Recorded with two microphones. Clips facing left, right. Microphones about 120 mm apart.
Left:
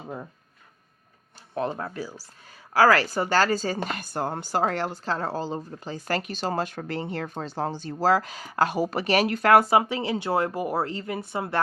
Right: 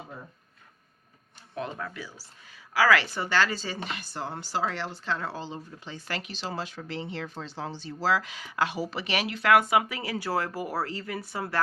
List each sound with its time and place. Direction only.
1.5 s speech: 35° left (ahead or behind); by 11.6 s 20° left (ahead or behind)